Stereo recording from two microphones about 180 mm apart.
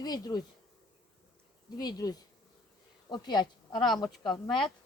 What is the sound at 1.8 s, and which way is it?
Speech, 20° left (ahead or behind).